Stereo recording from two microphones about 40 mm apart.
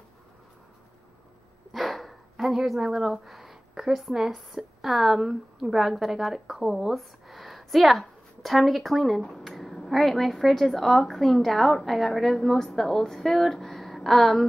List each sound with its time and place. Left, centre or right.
1.7 s dog: centre
2.6 s a woman's voice: centre